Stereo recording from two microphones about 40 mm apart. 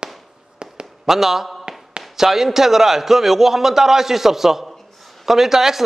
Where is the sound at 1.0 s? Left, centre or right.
Centre.